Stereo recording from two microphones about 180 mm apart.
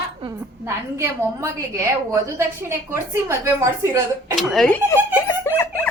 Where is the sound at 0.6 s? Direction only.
15° right (ahead or behind).